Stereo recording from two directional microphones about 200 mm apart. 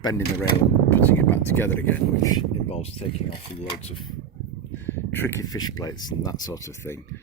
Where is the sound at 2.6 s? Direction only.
30° left (ahead or behind).